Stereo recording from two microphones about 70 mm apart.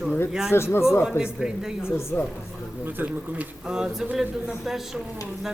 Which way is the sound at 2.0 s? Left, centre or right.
Left.